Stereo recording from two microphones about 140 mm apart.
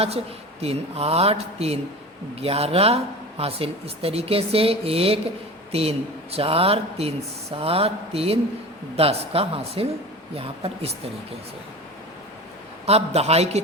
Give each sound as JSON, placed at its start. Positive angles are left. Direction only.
{"t": 0.6, "sound": "speech", "side_deg": -45}
{"t": 12.8, "sound": "speech", "side_deg": -50}